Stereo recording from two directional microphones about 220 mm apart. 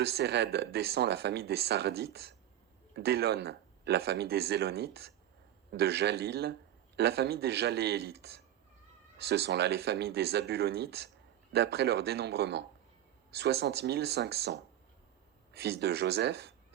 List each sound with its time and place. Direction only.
0.0 s a man's voice: 45° right (ahead or behind)